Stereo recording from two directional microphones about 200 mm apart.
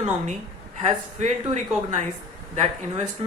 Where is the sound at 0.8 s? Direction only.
35° right (ahead or behind).